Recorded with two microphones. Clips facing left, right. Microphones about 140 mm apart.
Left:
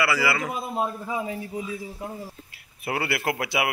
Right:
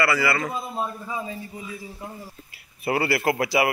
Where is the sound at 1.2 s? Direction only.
65° left (ahead or behind).